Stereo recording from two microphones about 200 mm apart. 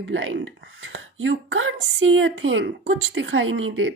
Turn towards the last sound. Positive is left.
turn(degrees=-75)  # may be behind; listen again after turning